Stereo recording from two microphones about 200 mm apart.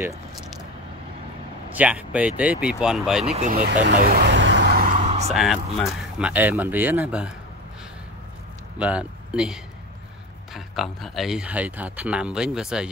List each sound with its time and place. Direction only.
1.7 s speech: 5° right (ahead or behind)
3.3 s speech: 40° right (ahead or behind)
3.8 s vehicle: 50° right (ahead or behind)
4.9 s vehicle: 30° right (ahead or behind)
5.3 s speech: centre (ahead or behind)
8.7 s speech: 5° right (ahead or behind)